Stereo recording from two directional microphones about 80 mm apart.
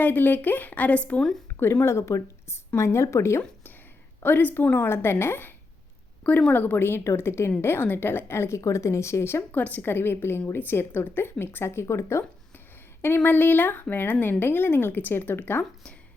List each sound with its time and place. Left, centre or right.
0.0 s a woman's voice: left
1.5 s a woman's voice: left
4.2 s a woman's voice: left
9.5 s a woman's voice: left